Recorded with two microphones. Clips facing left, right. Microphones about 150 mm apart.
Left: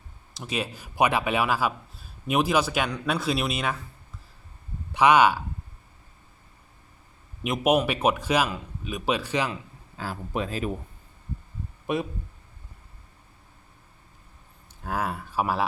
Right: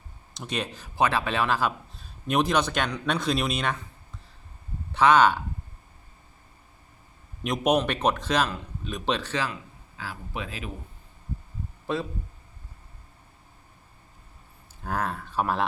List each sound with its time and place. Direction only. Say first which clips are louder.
0.3 s a man's voice: left 1 dB; 5° left (ahead or behind)
4.9 s speech: even; 10° left (ahead or behind)
7.4 s speech: left 1 dB; 5° left (ahead or behind)
10.0 s speech: left 5 dB; 40° left (ahead or behind)
11.9 s speech: left 2 dB; 20° left (ahead or behind)
14.8 s speech: even; 5° left (ahead or behind)